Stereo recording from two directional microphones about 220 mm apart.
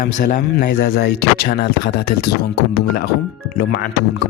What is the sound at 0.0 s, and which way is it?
Speech, 40° left (ahead or behind).